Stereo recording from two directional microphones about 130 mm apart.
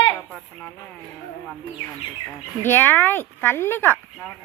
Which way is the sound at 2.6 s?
15° left (ahead or behind).